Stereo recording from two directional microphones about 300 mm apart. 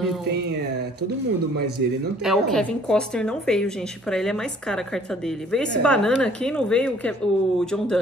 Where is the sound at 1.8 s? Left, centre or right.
Right.